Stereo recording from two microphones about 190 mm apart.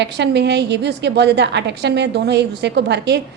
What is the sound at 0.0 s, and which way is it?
A woman's voice, 65° right (ahead or behind).